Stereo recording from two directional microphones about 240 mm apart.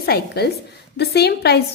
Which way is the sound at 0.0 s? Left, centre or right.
Left.